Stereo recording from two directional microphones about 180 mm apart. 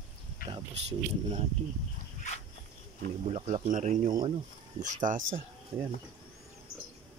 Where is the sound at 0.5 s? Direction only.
35° right (ahead or behind).